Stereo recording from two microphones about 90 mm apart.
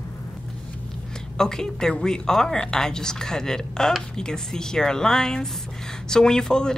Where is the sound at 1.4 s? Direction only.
5° left (ahead or behind).